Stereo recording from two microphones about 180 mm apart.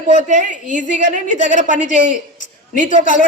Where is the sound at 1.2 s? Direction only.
45° left (ahead or behind).